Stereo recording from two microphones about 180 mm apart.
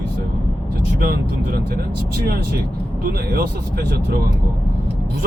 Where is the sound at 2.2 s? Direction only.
60° right (ahead or behind).